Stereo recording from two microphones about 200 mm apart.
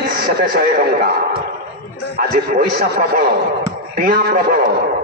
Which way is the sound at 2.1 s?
50° right (ahead or behind).